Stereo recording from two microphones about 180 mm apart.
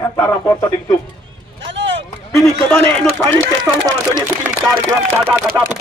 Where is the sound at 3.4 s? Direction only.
20° right (ahead or behind).